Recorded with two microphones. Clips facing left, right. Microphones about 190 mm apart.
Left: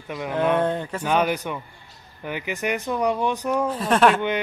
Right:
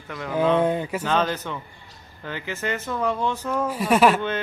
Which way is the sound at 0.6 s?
10° right (ahead or behind).